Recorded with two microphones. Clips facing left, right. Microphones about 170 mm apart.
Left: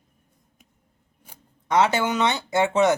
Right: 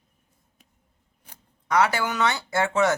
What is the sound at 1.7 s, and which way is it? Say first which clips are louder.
Speech: left 2 dB; 20° left (ahead or behind).